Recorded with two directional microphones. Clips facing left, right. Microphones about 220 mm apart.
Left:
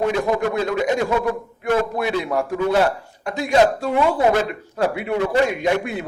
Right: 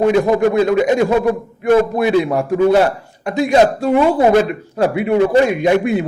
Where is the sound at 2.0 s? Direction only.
15° right (ahead or behind).